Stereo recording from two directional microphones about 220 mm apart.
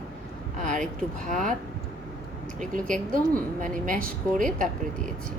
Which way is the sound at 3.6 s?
35° right (ahead or behind).